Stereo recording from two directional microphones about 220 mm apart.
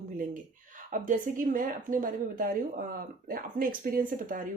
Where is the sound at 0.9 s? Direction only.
35° right (ahead or behind).